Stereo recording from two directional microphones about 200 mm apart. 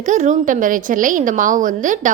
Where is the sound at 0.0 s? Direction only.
40° right (ahead or behind).